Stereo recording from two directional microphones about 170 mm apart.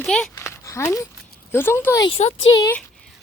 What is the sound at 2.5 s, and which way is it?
Speech, 20° left (ahead or behind).